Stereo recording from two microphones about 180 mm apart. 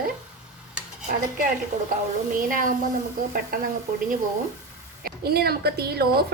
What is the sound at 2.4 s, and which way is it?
Speech, 50° right (ahead or behind).